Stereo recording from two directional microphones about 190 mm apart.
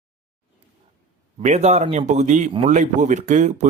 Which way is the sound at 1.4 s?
40° right (ahead or behind).